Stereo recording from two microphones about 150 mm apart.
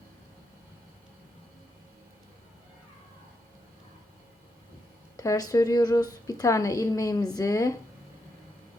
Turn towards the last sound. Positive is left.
turn(degrees=25)  # may be behind; listen again after turning